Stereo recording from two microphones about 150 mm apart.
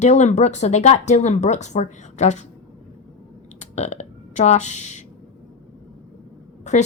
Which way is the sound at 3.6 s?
50° left (ahead or behind).